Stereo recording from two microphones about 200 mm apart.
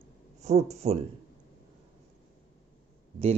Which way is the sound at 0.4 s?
35° right (ahead or behind).